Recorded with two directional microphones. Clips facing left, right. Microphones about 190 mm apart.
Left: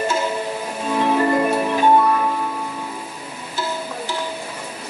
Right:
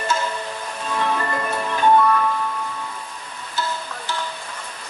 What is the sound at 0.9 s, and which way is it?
Music, 20° left (ahead or behind).